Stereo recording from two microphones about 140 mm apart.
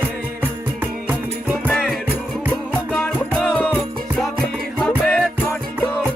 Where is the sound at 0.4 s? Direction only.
15° right (ahead or behind).